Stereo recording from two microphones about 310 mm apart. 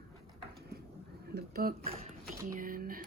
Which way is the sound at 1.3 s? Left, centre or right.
Right.